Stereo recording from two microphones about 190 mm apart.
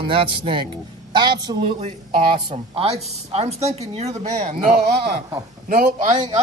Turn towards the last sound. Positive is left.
turn(degrees=-40)  # may be behind; listen again after turning